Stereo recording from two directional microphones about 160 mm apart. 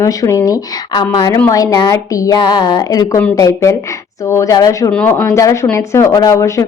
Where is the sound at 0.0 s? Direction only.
20° left (ahead or behind).